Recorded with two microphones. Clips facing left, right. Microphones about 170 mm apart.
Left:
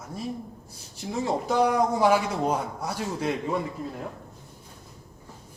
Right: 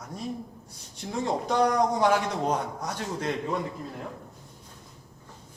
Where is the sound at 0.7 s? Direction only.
5° left (ahead or behind).